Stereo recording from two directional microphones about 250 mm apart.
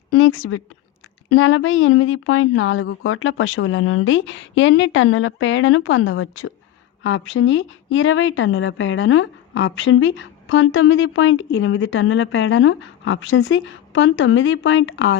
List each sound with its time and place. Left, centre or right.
0.1 s a woman's voice: left